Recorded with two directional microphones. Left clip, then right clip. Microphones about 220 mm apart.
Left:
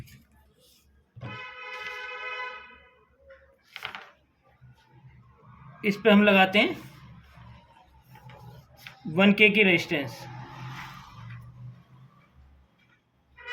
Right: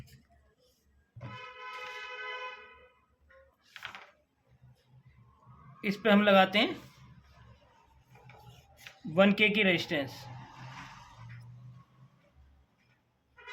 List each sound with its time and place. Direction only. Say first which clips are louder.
3.7 s a sound: left 7 dB; 20° right (ahead or behind)
5.8 s a man's voice: left 5 dB; 25° right (ahead or behind)
9.1 s a man's voice: left 5 dB; 20° right (ahead or behind)